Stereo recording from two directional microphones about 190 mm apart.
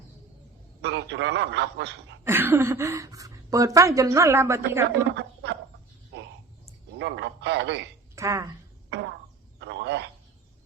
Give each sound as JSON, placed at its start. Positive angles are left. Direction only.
{"t": 0.8, "sound": "a man's voice", "side_deg": -65}
{"t": 2.2, "sound": "a woman's voice", "side_deg": -10}
{"t": 5.1, "sound": "a sound", "side_deg": -65}
{"t": 6.9, "sound": "a man's voice", "side_deg": -65}
{"t": 8.1, "sound": "speech", "side_deg": -15}
{"t": 8.9, "sound": "a sound", "side_deg": -65}